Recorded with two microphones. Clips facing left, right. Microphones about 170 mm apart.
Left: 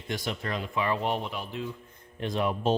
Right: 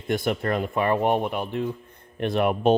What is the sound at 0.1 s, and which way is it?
Speech, 55° right (ahead or behind).